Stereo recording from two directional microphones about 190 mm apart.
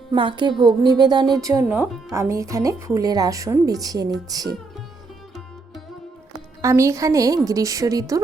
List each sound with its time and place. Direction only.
0.1 s music: 25° right (ahead or behind)
1.6 s speech: 5° right (ahead or behind)
4.3 s music: 20° right (ahead or behind)
6.6 s speech: 15° right (ahead or behind)